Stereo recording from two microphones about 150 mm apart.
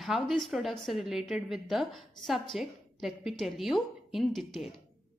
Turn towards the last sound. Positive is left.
turn(degrees=0)  # may be behind; listen again after turning